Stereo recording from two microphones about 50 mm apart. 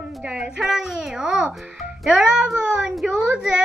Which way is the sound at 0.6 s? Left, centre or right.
Centre.